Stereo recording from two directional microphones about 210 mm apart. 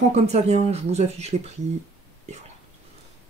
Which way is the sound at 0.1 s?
30° right (ahead or behind).